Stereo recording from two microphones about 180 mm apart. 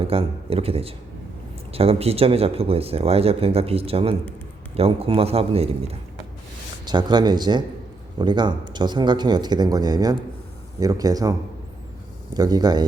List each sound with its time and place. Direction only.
0.0 s speech: 30° right (ahead or behind)